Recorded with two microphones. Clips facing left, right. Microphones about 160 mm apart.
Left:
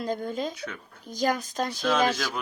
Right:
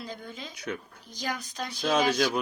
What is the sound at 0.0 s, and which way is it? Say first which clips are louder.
Speech: left 11 dB; 45° left (ahead or behind).